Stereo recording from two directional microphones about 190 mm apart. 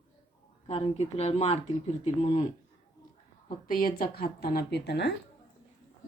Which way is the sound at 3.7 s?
50° left (ahead or behind).